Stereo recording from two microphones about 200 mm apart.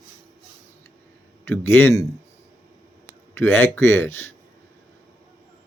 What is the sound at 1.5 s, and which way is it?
Speech, 10° left (ahead or behind).